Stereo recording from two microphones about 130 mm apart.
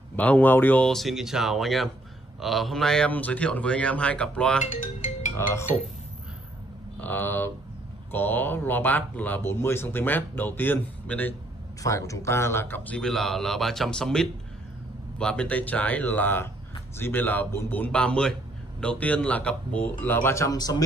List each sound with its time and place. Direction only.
0.1 s a man's voice: 15° left (ahead or behind)
5.4 s speech: 20° left (ahead or behind)
7.0 s a man's voice: 15° left (ahead or behind)
11.8 s a man's voice: 25° left (ahead or behind)